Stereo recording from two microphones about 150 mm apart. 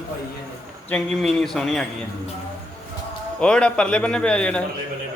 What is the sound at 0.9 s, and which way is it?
Speech, 5° left (ahead or behind).